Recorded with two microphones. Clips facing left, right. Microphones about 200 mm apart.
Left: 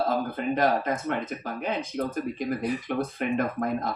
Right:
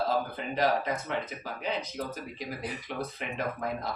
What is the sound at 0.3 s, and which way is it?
Speech, 50° left (ahead or behind).